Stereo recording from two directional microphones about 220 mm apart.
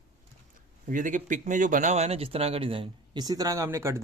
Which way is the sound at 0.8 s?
35° right (ahead or behind).